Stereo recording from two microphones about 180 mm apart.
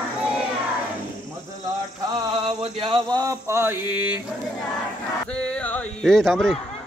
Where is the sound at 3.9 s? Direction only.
10° right (ahead or behind).